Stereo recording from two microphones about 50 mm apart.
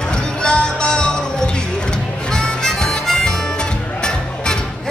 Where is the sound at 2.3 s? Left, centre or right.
Centre.